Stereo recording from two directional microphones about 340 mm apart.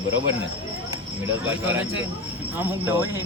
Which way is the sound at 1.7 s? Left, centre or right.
Centre.